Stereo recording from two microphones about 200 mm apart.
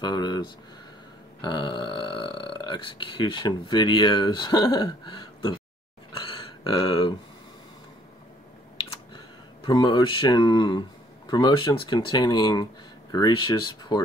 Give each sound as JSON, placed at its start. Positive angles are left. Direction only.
{"t": 0.0, "sound": "speech", "side_deg": 20}
{"t": 6.1, "sound": "a sound", "side_deg": 25}
{"t": 8.8, "sound": "speech", "side_deg": 20}